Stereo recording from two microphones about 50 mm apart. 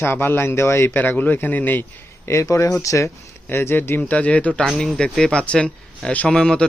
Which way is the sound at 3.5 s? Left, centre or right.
Left.